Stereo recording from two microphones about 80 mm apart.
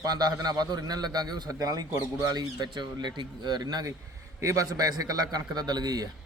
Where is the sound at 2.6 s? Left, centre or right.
Right.